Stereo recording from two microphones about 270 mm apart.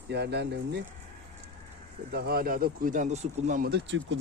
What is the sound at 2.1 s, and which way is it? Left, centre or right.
Speech, right.